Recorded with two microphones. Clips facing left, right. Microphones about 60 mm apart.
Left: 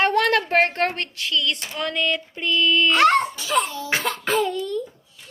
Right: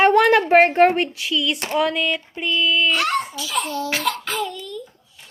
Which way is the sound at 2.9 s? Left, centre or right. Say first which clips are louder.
Left 5 dB; left.